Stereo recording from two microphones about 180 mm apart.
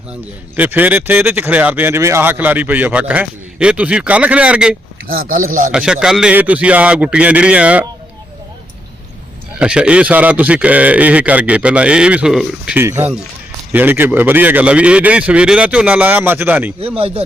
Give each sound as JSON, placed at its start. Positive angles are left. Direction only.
{"t": 0.5, "sound": "speech", "side_deg": -10}
{"t": 5.0, "sound": "a man's voice", "side_deg": -50}
{"t": 5.7, "sound": "speech", "side_deg": -5}
{"t": 9.6, "sound": "speech", "side_deg": -5}